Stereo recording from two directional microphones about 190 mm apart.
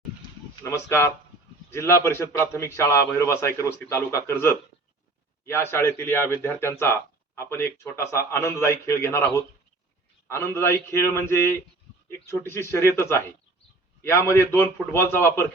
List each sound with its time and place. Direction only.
0.6 s speech: 15° left (ahead or behind)